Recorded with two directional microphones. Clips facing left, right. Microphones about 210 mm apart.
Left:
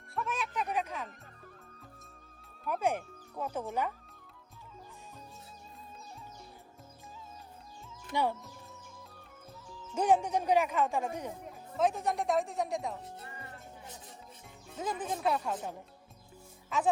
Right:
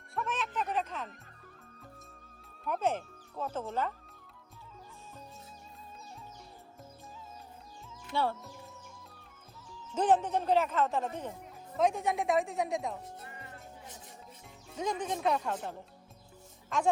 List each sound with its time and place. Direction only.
0.0 s music: centre (ahead or behind)
2.6 s speech: 10° left (ahead or behind)
8.1 s speech: 15° left (ahead or behind)
9.9 s speech: 10° left (ahead or behind)
11.8 s speech: centre (ahead or behind)
14.8 s speech: 5° left (ahead or behind)